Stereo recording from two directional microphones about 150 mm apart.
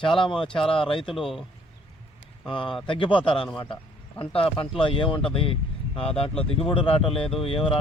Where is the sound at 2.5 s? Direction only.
35° left (ahead or behind).